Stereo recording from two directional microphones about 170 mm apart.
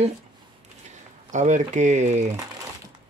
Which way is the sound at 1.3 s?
45° right (ahead or behind).